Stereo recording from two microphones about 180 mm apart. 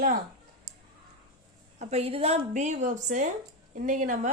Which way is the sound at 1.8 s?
35° right (ahead or behind).